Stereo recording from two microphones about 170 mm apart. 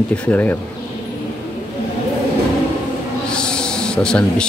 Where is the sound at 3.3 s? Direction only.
5° left (ahead or behind).